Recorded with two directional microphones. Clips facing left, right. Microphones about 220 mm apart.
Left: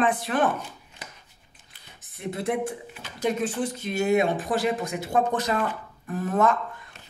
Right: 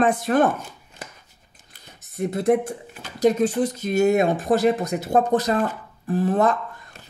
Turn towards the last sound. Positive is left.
turn(degrees=-35)  # may be behind; listen again after turning